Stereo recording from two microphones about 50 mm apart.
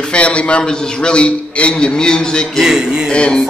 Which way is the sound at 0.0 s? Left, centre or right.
Left.